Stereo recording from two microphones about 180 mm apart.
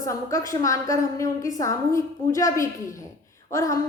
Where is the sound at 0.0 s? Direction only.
20° left (ahead or behind).